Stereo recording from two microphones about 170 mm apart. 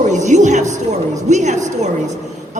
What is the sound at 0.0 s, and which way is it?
Speech, 45° right (ahead or behind).